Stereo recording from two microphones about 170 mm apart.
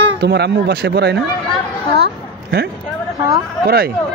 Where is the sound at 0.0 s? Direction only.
75° right (ahead or behind).